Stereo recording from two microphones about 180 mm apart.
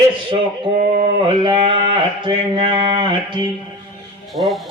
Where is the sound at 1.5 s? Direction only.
30° right (ahead or behind).